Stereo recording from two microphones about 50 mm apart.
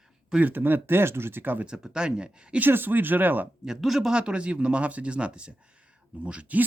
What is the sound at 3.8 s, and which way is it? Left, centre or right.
Speech, centre.